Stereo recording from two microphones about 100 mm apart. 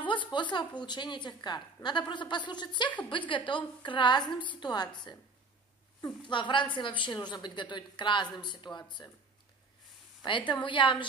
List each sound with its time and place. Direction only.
0.0 s a woman's voice: 55° left (ahead or behind)
6.3 s a woman's voice: 55° left (ahead or behind)
10.2 s a woman's voice: 55° left (ahead or behind)